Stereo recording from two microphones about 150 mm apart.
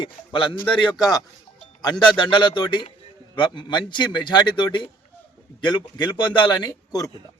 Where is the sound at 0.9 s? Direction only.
25° left (ahead or behind).